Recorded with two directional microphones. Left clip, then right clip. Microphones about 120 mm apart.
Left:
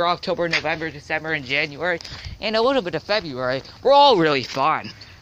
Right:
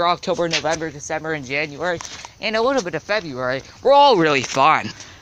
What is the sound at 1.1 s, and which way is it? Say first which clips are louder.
Speech: left 1 dB; 40° right (ahead or behind).